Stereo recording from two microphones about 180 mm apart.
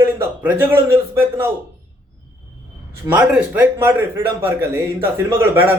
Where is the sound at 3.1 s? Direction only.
5° right (ahead or behind).